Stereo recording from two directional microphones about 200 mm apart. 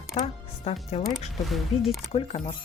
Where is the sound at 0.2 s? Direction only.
30° left (ahead or behind).